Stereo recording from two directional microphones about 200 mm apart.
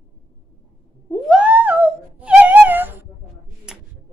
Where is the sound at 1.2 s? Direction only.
5° right (ahead or behind).